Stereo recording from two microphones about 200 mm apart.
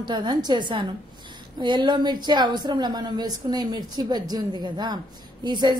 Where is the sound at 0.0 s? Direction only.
20° right (ahead or behind).